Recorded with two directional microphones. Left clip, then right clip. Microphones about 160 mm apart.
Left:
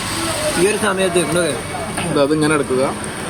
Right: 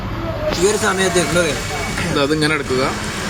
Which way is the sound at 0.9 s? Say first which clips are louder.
Even; 45° left (ahead or behind).